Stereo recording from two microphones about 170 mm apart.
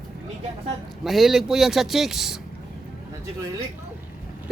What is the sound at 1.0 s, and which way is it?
Speech, centre (ahead or behind).